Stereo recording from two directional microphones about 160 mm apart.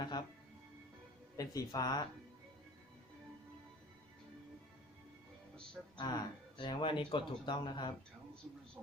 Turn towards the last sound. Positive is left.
turn(degrees=30)  # may be behind; listen again after turning